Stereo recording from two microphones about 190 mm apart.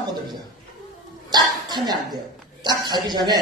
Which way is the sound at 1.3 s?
20° right (ahead or behind).